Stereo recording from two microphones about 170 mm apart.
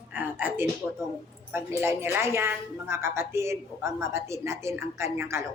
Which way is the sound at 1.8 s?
15° right (ahead or behind).